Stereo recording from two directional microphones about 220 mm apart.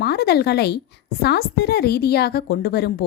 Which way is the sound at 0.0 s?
45° left (ahead or behind).